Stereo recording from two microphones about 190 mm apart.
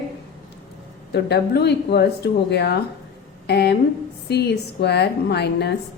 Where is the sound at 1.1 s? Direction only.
60° left (ahead or behind).